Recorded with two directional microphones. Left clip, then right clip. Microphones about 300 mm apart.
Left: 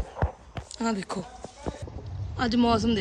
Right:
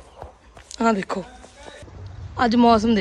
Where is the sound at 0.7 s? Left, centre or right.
Centre.